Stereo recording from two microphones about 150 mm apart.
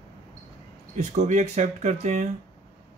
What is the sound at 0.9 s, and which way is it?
Speech, 55° right (ahead or behind).